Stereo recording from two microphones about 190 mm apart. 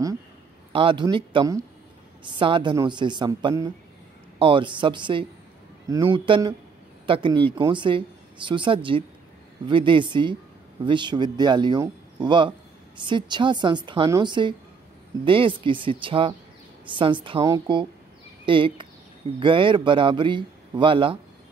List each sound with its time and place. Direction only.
0.7 s a man's voice: 25° right (ahead or behind)